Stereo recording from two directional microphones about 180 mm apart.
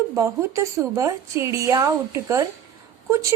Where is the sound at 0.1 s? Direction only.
15° right (ahead or behind).